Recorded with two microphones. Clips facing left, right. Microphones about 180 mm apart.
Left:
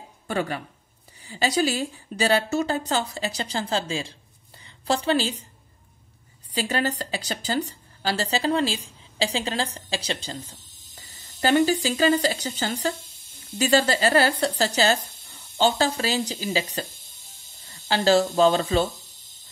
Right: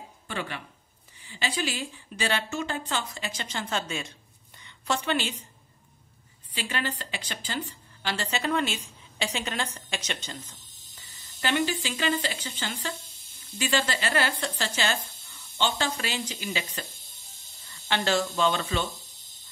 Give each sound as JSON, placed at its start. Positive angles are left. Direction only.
{"t": 0.3, "sound": "a woman's voice", "side_deg": 40}
{"t": 6.5, "sound": "a woman's voice", "side_deg": 40}